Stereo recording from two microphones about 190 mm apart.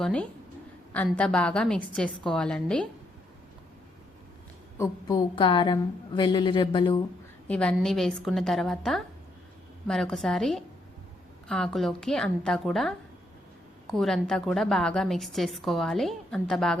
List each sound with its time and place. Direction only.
0.0 s a woman's voice: 5° left (ahead or behind)
4.8 s a woman's voice: 20° left (ahead or behind)
7.4 s a woman's voice: 5° left (ahead or behind)